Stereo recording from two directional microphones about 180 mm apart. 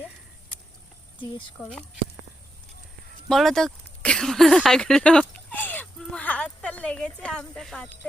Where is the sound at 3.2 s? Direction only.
Centre (ahead or behind).